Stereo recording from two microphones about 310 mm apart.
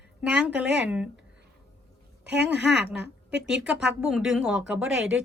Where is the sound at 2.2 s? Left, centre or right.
Right.